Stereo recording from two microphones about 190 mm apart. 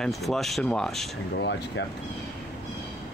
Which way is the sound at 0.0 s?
Centre (ahead or behind).